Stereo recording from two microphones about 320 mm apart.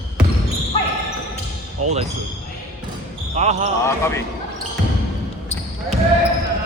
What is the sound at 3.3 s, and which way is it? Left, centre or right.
Speech, right.